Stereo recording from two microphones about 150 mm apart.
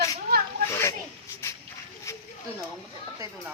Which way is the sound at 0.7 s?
20° left (ahead or behind).